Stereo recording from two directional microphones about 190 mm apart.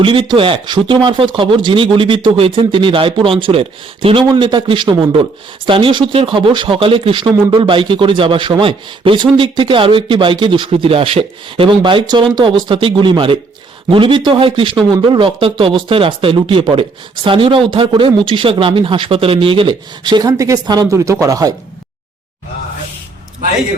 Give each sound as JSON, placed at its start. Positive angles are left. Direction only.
{"t": 0.0, "sound": "a man's voice", "side_deg": -25}